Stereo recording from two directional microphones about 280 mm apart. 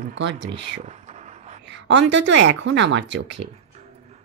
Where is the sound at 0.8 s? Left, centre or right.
Right.